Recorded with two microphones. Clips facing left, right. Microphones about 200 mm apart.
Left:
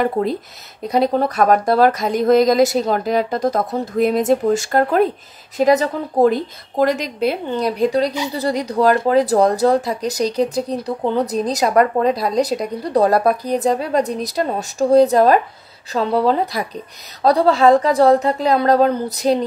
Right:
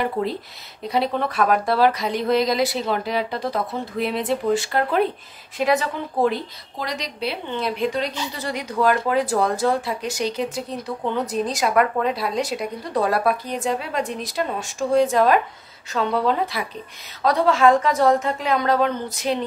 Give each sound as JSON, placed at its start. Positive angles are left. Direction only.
{"t": 0.0, "sound": "speech", "side_deg": 45}